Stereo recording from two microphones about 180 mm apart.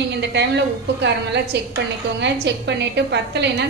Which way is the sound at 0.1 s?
70° right (ahead or behind).